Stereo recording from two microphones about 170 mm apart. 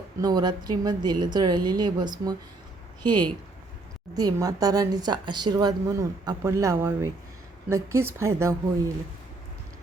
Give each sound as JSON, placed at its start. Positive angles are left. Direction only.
{"t": 0.2, "sound": "speech", "side_deg": -25}